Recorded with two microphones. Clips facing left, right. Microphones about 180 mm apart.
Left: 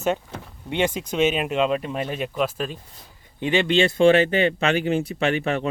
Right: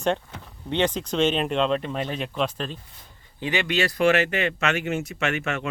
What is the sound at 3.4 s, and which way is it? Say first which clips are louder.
Speech: left 5 dB; 25° left (ahead or behind).